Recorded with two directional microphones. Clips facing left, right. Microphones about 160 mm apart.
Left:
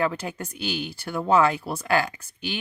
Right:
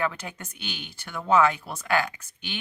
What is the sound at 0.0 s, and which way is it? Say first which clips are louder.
Speech: left 4 dB; 35° left (ahead or behind).